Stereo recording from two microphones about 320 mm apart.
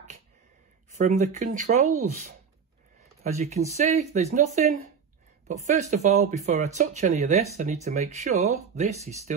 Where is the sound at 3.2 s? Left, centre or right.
Right.